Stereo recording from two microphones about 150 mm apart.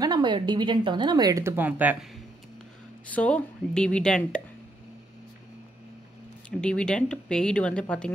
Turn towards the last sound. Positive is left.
turn(degrees=5)  # may be behind; listen again after turning